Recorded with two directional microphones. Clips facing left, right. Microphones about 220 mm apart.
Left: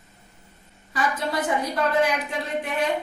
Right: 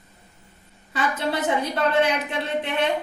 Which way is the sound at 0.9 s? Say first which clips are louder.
Right 1 dB; 25° right (ahead or behind).